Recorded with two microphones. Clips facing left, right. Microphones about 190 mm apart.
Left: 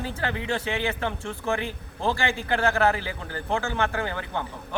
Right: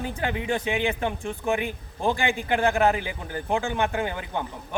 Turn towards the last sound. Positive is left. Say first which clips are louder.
# right 1 dB
turn(degrees=-15)  # may be behind; listen again after turning